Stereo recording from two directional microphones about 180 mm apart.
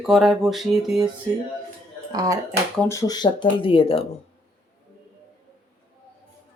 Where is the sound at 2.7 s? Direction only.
15° left (ahead or behind).